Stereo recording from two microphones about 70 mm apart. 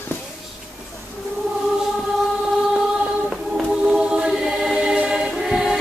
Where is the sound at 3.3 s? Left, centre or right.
Centre.